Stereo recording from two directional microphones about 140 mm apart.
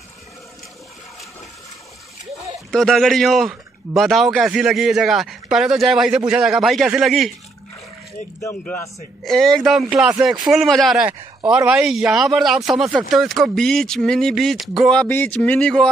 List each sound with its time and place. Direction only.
2.7 s speech: centre (ahead or behind)
8.4 s a man's voice: 15° left (ahead or behind)
9.2 s speech: centre (ahead or behind)